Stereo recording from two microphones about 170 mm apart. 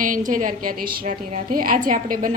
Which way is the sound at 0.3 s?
50° right (ahead or behind).